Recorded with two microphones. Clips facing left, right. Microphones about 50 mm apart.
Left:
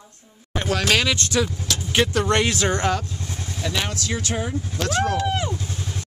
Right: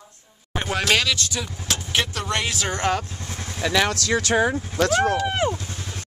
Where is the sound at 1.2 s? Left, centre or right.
Left.